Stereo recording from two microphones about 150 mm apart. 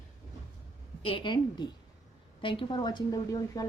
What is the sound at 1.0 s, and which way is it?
A woman's voice, 35° left (ahead or behind).